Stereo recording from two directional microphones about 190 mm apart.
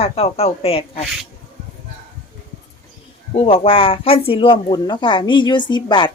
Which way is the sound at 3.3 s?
30° left (ahead or behind).